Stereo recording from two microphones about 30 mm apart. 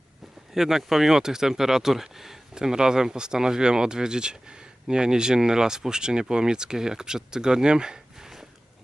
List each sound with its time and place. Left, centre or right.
0.5 s speech: centre
2.6 s speech: right